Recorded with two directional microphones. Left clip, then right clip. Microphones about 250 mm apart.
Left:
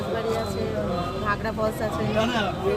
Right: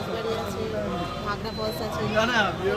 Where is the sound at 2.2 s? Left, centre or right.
Centre.